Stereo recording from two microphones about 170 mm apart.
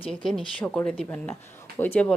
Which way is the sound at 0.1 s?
Centre (ahead or behind).